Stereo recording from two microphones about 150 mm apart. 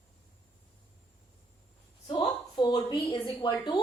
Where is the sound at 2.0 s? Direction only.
30° left (ahead or behind).